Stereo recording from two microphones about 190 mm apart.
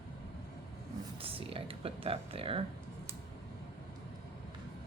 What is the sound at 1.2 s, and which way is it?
Speech, 30° right (ahead or behind).